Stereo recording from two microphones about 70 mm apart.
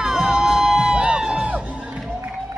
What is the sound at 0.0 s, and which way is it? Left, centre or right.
Music, centre.